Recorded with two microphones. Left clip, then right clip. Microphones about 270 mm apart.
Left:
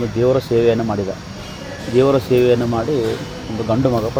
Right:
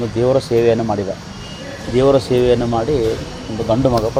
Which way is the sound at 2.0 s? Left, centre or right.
Right.